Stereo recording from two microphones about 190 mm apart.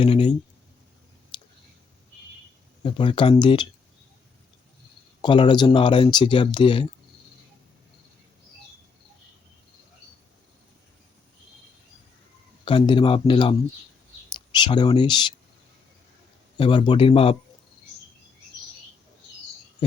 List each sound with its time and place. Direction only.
0.0 s a sound: 25° left (ahead or behind)
2.8 s speech: 25° left (ahead or behind)
5.2 s speech: 25° left (ahead or behind)
12.6 s speech: 25° left (ahead or behind)
16.6 s speech: 25° left (ahead or behind)